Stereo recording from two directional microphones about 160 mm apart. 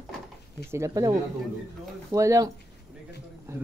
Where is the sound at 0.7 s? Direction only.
20° right (ahead or behind).